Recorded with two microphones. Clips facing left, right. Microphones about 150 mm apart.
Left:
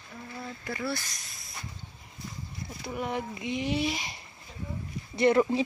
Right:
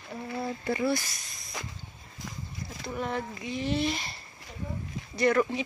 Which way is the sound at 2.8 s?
10° left (ahead or behind).